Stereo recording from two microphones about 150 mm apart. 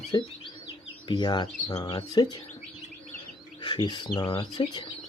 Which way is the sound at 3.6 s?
30° left (ahead or behind).